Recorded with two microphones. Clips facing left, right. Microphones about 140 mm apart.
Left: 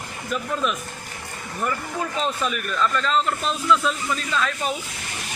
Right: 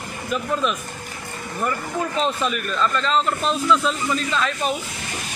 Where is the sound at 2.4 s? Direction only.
5° left (ahead or behind).